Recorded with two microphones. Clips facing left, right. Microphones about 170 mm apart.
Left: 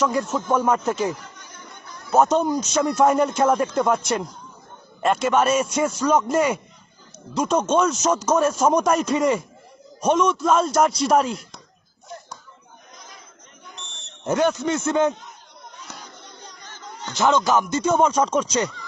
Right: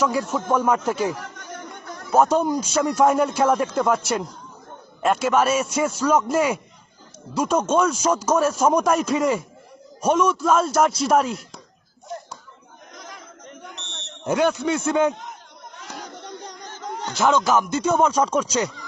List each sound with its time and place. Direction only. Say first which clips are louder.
0.0 s speech: even; 10° right (ahead or behind)
2.2 s a man's voice: even; 10° right (ahead or behind)
13.6 s buzzer: even; 80° right
14.3 s speech: even; 5° right (ahead or behind)
15.8 s a sound: right 7 dB; 75° right (ahead or behind)
17.2 s speech: even; 10° right (ahead or behind)